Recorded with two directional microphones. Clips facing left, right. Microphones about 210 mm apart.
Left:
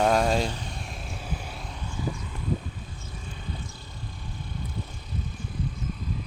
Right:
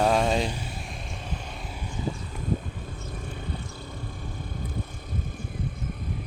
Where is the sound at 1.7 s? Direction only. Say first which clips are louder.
Right 1 dB; 10° right (ahead or behind).